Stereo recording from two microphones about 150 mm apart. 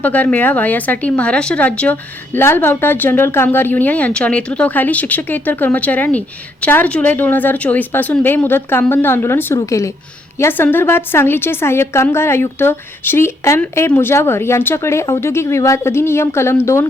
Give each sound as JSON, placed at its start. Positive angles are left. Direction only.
{"t": 0.0, "sound": "speech", "side_deg": 10}